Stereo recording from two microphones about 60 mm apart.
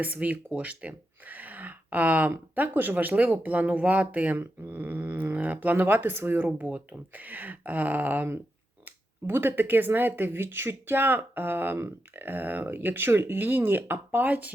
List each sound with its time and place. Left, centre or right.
0.0 s speech: right
4.4 s speech: right